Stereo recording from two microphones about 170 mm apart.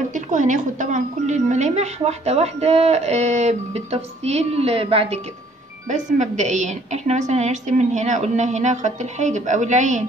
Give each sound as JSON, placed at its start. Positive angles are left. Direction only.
{"t": 0.1, "sound": "a woman's voice", "side_deg": -45}
{"t": 5.9, "sound": "a woman's voice", "side_deg": -45}